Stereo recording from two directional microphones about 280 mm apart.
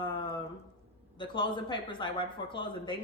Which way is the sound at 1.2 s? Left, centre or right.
Centre.